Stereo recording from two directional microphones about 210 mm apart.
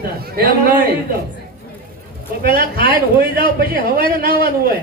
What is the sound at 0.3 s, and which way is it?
Speech, 45° right (ahead or behind).